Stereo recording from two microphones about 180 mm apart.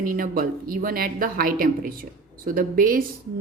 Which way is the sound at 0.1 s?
50° right (ahead or behind).